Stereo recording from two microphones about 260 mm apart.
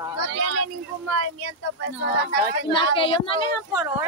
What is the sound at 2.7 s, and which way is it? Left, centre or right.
Speech, centre.